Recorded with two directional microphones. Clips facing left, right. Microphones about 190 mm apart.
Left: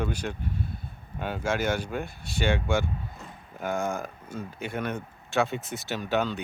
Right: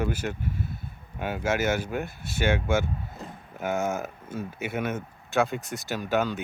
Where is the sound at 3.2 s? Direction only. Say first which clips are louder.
Right 4 dB; 35° right (ahead or behind).